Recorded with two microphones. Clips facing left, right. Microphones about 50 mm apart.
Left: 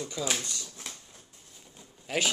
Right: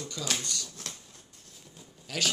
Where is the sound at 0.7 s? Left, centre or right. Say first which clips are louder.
Even; centre.